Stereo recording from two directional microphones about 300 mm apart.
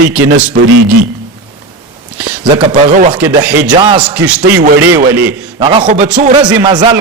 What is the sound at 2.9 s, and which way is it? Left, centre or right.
Speech, right.